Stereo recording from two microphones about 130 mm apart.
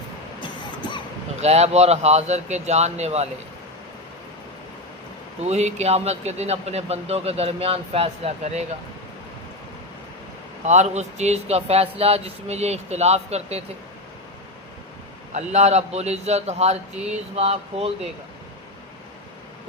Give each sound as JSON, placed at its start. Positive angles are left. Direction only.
{"t": 0.8, "sound": "a sound", "side_deg": 35}
{"t": 1.4, "sound": "speech", "side_deg": -55}
{"t": 5.4, "sound": "speech", "side_deg": -60}
{"t": 10.6, "sound": "speech", "side_deg": -60}
{"t": 15.3, "sound": "speech", "side_deg": -60}